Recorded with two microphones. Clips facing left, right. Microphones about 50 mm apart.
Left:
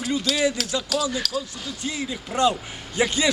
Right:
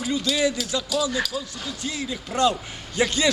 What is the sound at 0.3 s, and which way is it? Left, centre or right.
Speech, left.